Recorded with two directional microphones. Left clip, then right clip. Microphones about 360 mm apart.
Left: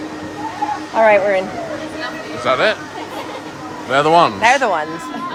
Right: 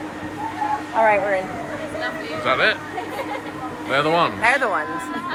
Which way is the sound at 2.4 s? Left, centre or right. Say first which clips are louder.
Left 3 dB; centre.